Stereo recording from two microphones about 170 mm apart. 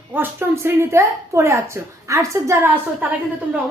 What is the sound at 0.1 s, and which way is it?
A woman's voice, 15° right (ahead or behind).